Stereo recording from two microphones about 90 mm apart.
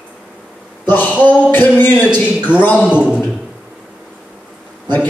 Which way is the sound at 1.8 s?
20° left (ahead or behind).